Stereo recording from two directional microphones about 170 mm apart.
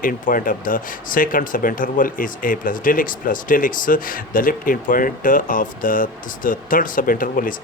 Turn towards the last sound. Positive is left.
turn(degrees=55)  # may be behind; listen again after turning